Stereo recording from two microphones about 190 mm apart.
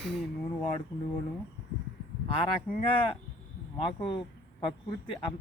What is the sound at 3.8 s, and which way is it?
Speech, 25° left (ahead or behind).